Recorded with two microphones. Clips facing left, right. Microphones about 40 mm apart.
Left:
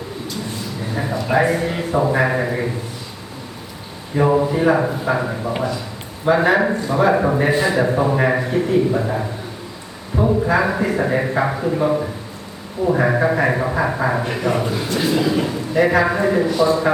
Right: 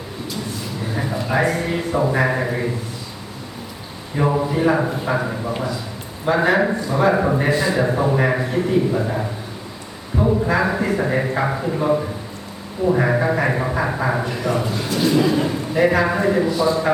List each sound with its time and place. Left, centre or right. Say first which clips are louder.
1.3 s a man's voice: left 2 dB; centre
4.2 s a man's voice: left 3 dB; centre
7.5 s a man's voice: left 2 dB; left
7.8 s a man's voice: left 1 dB; centre
14.4 s a man's voice: left 2 dB; left
14.7 s a man's voice: even; centre
16.5 s a man's voice: left 2 dB; left